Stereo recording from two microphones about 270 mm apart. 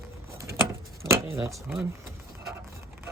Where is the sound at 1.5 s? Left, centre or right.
Centre.